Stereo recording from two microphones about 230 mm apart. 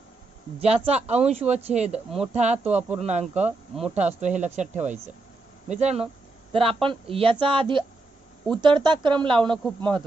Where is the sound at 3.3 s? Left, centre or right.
Centre.